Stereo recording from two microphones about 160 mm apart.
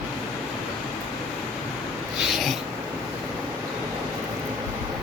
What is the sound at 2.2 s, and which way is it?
Snort, centre (ahead or behind).